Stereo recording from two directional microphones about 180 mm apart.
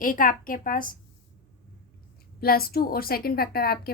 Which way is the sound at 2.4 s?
55° left (ahead or behind).